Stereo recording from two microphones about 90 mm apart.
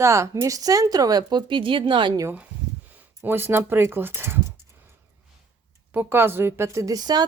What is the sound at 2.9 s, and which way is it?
Speech, 20° right (ahead or behind).